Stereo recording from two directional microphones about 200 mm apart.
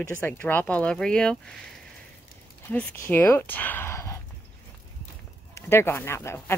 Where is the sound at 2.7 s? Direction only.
10° left (ahead or behind).